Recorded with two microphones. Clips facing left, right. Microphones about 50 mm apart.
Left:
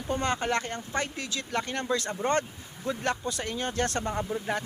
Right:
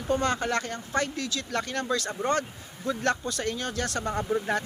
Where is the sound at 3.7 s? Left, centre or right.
Left.